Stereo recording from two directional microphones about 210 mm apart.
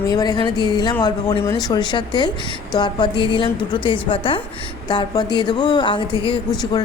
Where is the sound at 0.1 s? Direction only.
20° left (ahead or behind).